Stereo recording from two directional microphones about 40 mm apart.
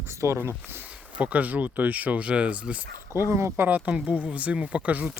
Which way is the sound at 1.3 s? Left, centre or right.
Right.